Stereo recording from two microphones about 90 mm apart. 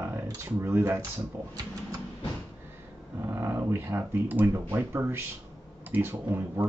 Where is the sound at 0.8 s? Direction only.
35° right (ahead or behind).